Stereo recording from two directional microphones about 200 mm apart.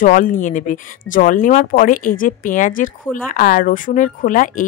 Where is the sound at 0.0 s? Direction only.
40° left (ahead or behind).